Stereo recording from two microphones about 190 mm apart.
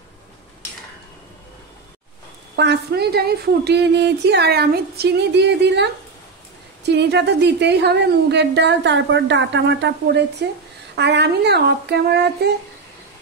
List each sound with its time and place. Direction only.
2.5 s a woman's voice: 65° right (ahead or behind)
6.9 s a woman's voice: 65° right (ahead or behind)